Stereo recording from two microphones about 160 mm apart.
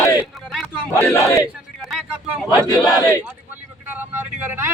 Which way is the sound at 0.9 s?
10° left (ahead or behind).